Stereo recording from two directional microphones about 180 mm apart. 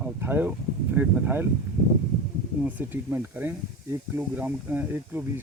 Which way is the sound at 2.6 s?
10° right (ahead or behind).